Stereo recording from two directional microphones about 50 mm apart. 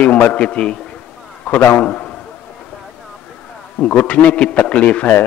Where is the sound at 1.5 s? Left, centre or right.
Left.